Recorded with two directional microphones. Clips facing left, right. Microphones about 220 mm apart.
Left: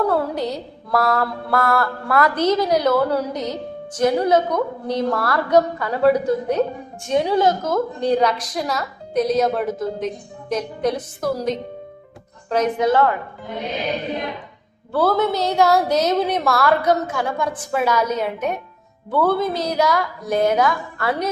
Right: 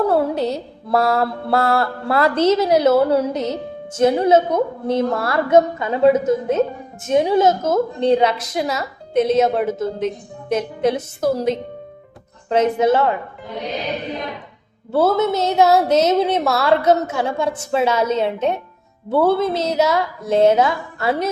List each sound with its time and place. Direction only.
0.1 s mantra: 25° right (ahead or behind)
14.9 s mantra: 20° right (ahead or behind)